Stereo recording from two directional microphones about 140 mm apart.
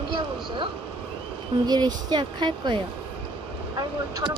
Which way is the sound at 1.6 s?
30° right (ahead or behind).